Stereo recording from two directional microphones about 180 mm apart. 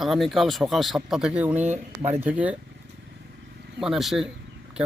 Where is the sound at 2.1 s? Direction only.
10° right (ahead or behind).